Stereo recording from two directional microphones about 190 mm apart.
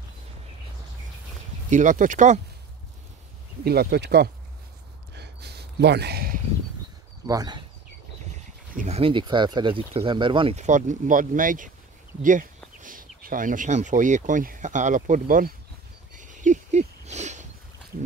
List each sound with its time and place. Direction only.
1.7 s speech: 40° right (ahead or behind)
3.6 s speech: 55° right (ahead or behind)
5.1 s a sound: 60° right (ahead or behind)
7.2 s speech: 20° right (ahead or behind)
8.7 s speech: 35° right (ahead or behind)
16.2 s a sound: 40° right (ahead or behind)